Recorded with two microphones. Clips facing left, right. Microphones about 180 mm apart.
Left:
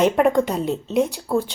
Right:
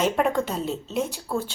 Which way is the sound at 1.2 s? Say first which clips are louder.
Left 6 dB; 15° left (ahead or behind).